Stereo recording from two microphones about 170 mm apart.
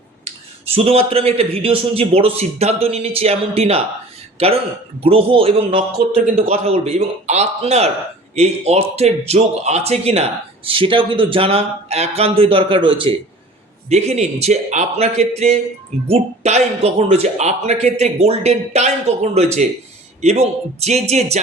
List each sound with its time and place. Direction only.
0.7 s a man's voice: 35° right (ahead or behind)
13.9 s speech: 40° right (ahead or behind)